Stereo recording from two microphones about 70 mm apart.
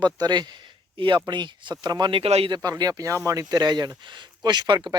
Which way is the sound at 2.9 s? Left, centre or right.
Right.